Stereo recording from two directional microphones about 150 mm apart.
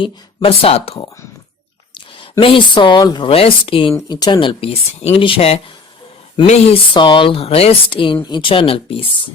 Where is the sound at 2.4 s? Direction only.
35° left (ahead or behind).